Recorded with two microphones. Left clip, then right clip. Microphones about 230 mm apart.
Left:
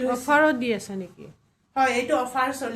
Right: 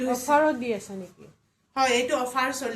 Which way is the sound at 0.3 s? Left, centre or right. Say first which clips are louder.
Left 2 dB; left.